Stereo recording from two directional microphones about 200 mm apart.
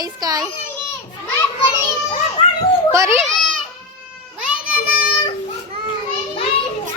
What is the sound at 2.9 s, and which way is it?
Speech, 15° right (ahead or behind).